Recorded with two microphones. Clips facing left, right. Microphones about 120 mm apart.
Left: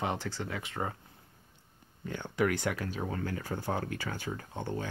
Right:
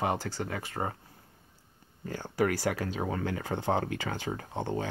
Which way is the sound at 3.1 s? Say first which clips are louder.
Right 3 dB; 90° right.